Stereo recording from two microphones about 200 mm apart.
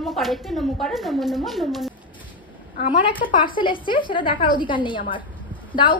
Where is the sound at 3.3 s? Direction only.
25° left (ahead or behind).